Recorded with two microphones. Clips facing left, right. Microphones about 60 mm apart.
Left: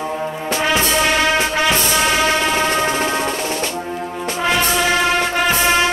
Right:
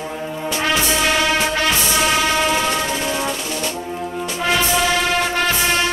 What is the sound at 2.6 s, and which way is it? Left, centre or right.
Music, left.